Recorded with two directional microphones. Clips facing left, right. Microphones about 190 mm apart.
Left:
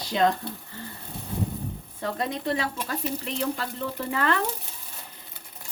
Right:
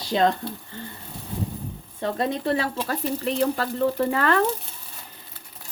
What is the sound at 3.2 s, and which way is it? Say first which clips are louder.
Speech: right 6 dB; 45° right (ahead or behind).